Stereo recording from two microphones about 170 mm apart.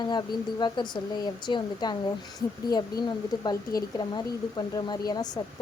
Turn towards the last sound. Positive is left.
turn(degrees=25)  # may be behind; listen again after turning